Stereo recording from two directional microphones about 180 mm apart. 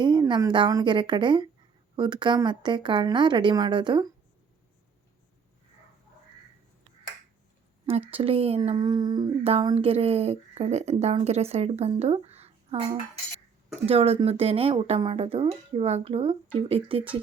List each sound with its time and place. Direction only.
0.0 s a woman's voice: 25° right (ahead or behind)
8.1 s speech: 30° right (ahead or behind)
13.8 s a woman's voice: 30° right (ahead or behind)